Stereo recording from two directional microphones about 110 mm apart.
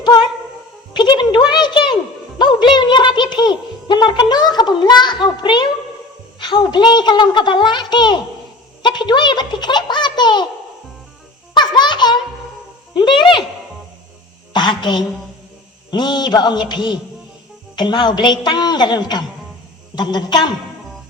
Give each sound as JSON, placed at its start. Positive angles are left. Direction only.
{"t": 0.0, "sound": "music", "side_deg": 40}
{"t": 0.9, "sound": "a sound", "side_deg": 45}
{"t": 2.4, "sound": "a child's voice", "side_deg": 45}
{"t": 11.5, "sound": "music", "side_deg": 45}
{"t": 12.9, "sound": "a child's voice", "side_deg": 45}
{"t": 14.5, "sound": "a woman's voice", "side_deg": 40}